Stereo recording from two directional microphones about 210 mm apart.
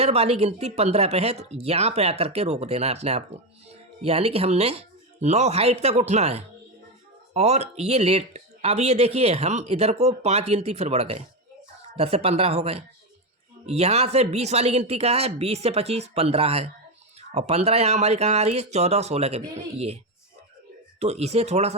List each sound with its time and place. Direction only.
0.0 s speech: 30° right (ahead or behind)
21.0 s speech: 30° right (ahead or behind)